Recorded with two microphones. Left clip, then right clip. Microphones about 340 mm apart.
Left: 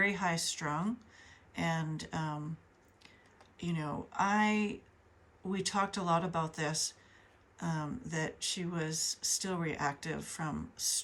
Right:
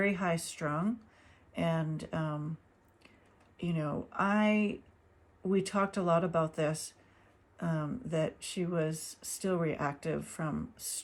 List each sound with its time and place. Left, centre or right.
0.0 s speech: centre
3.6 s speech: centre